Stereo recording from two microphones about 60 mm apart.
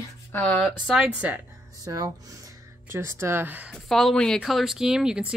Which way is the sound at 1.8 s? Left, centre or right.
Right.